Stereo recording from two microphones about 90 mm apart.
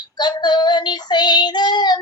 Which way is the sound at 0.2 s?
55° left (ahead or behind).